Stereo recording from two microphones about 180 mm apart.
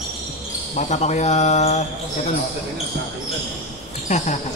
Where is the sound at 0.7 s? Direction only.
40° left (ahead or behind).